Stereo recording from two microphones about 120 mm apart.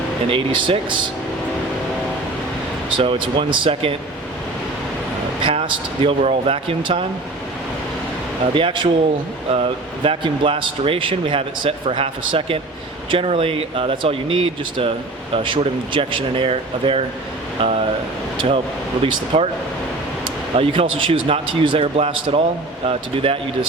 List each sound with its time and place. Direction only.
0.3 s speech: 45° right (ahead or behind)
3.0 s speech: 45° right (ahead or behind)
5.4 s speech: 45° right (ahead or behind)
8.5 s speech: 45° right (ahead or behind)
20.6 s speech: 50° right (ahead or behind)